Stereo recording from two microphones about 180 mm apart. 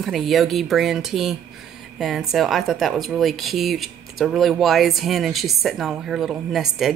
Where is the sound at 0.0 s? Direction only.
Centre (ahead or behind).